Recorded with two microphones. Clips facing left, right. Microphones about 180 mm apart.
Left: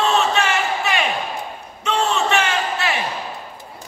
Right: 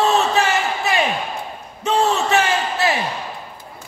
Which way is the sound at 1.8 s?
35° right (ahead or behind).